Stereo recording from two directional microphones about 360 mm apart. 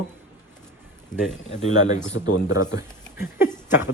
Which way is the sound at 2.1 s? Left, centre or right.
Left.